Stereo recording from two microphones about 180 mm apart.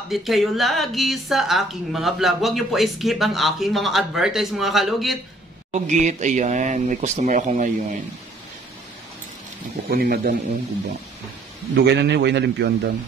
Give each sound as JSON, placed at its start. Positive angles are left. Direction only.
{"t": 0.1, "sound": "a woman's voice", "side_deg": 0}
{"t": 5.7, "sound": "speech", "side_deg": -40}
{"t": 9.8, "sound": "a man's voice", "side_deg": -55}
{"t": 11.7, "sound": "a man's voice", "side_deg": -70}